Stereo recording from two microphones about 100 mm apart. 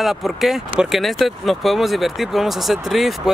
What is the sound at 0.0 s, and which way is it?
Speech, centre (ahead or behind).